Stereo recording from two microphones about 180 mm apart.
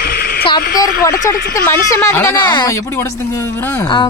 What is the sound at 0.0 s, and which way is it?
Radio, 55° left (ahead or behind).